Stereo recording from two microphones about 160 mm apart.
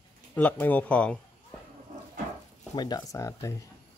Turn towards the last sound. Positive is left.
turn(degrees=20)  # may be behind; listen again after turning